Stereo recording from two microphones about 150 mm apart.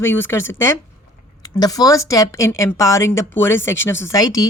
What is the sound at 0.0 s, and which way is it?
A woman's voice, 15° left (ahead or behind).